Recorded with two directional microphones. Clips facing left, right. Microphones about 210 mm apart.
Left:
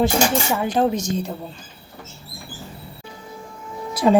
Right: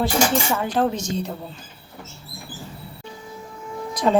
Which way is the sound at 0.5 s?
15° left (ahead or behind).